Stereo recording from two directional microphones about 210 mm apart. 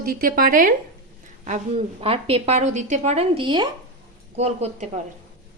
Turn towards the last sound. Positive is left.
turn(degrees=-35)  # may be behind; listen again after turning